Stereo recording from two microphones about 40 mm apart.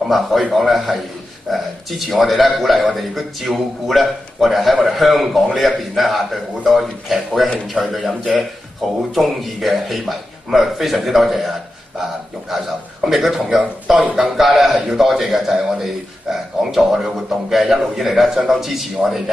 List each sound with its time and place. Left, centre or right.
0.5 s a man's voice: centre